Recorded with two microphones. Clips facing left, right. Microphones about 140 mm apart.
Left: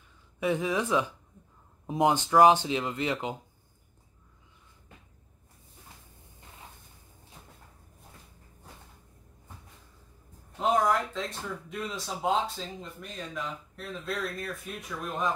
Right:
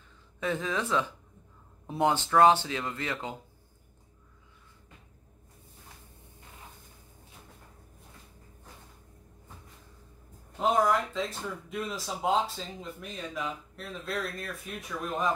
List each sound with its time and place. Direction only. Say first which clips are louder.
0.4 s speech: left 3 dB; 15° left (ahead or behind)
10.6 s speech: even; centre (ahead or behind)